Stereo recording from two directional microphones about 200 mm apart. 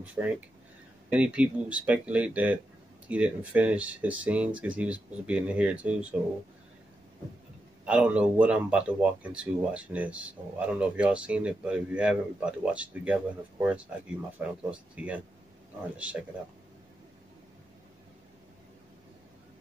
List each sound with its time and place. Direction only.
0.0 s speech: 5° right (ahead or behind)
7.8 s speech: 5° right (ahead or behind)